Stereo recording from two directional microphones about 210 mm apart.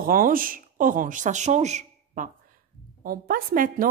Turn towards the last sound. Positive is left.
turn(degrees=-40)  # may be behind; listen again after turning